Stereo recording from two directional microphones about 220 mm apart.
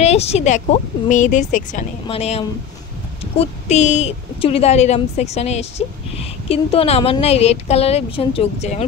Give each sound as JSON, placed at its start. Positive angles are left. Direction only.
{"t": 0.0, "sound": "a woman's voice", "side_deg": 30}